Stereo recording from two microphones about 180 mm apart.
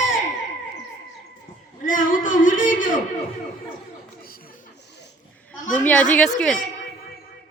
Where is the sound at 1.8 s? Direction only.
50° left (ahead or behind).